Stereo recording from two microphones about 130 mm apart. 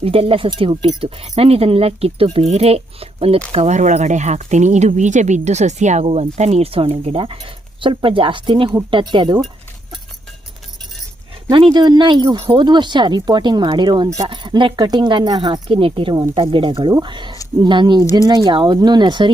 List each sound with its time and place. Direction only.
0.0 s speech: 50° right (ahead or behind)
11.5 s speech: 35° right (ahead or behind)